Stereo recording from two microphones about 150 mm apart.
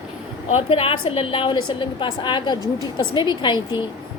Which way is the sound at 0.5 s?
40° left (ahead or behind).